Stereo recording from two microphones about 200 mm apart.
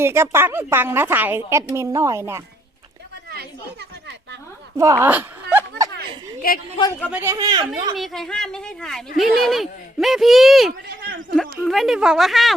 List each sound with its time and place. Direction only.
0.0 s a woman's voice: 10° right (ahead or behind)
3.2 s chatter: 50° right (ahead or behind)
4.8 s speech: 15° right (ahead or behind)
6.4 s speech: 50° left (ahead or behind)
7.1 s speech: 10° right (ahead or behind)
7.9 s speech: centre (ahead or behind)